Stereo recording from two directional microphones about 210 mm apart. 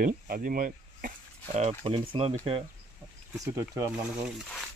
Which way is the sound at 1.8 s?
25° right (ahead or behind).